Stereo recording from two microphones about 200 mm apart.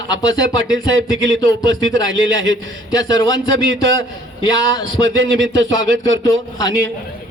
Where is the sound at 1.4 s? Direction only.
20° left (ahead or behind).